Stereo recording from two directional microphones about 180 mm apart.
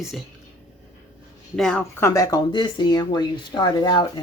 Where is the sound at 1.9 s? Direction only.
15° left (ahead or behind).